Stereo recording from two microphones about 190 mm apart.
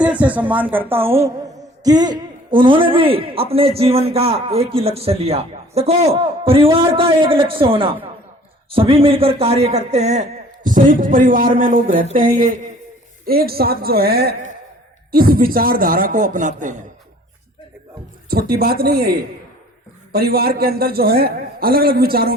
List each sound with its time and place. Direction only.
0.0 s a man's voice: 5° right (ahead or behind); by 16.7 s 40° right (ahead or behind)
18.3 s a man's voice: 55° right (ahead or behind)